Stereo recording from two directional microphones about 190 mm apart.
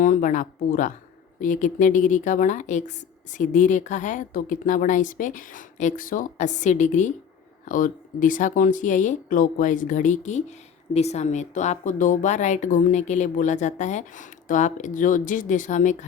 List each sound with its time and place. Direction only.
0.0 s a woman's voice: 45° left (ahead or behind)